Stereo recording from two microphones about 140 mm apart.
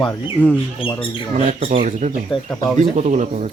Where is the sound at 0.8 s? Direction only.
40° left (ahead or behind).